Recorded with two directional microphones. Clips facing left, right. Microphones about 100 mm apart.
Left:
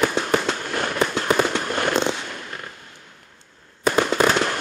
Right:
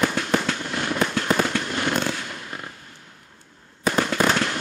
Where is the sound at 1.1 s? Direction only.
20° left (ahead or behind).